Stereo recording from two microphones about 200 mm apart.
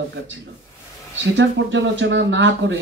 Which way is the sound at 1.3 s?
65° right (ahead or behind).